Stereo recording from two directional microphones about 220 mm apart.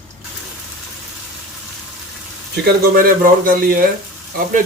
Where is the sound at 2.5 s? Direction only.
45° right (ahead or behind).